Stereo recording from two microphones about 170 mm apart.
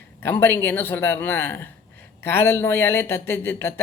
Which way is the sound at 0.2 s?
15° left (ahead or behind).